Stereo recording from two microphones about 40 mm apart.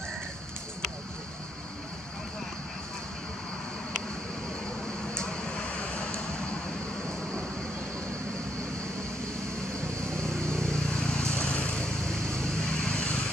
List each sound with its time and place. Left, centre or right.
5.1 s vehicle: left
10.2 s vehicle: centre
11.3 s vehicle: left
12.0 s vehicle: centre